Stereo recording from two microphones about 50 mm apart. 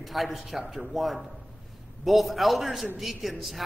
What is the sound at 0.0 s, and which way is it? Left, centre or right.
A woman's voice, centre.